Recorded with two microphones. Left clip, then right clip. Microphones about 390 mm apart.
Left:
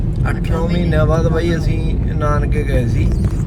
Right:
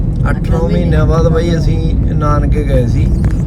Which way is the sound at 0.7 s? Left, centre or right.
Centre.